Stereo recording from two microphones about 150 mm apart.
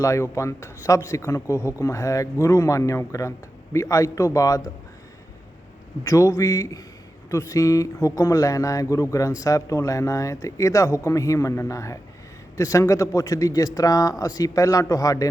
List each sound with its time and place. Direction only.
0.0 s speech: 20° left (ahead or behind)
6.0 s speech: 20° left (ahead or behind)